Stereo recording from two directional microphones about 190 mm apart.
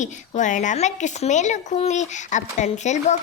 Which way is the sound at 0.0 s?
40° left (ahead or behind).